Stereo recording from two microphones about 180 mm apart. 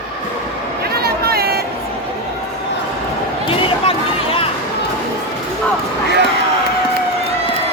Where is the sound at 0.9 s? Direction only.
60° right (ahead or behind).